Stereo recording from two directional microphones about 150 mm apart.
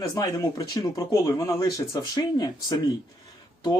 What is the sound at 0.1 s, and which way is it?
Speech, 25° left (ahead or behind).